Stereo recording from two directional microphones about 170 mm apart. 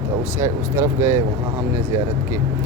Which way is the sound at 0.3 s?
15° right (ahead or behind).